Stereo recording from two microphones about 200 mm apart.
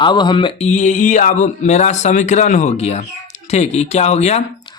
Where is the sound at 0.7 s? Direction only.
35° left (ahead or behind).